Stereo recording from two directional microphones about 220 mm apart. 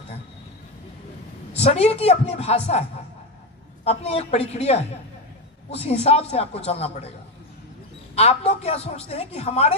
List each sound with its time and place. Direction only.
1.5 s a man's voice: 30° left (ahead or behind)
3.8 s a man's voice: 30° left (ahead or behind)
8.1 s a man's voice: 30° left (ahead or behind)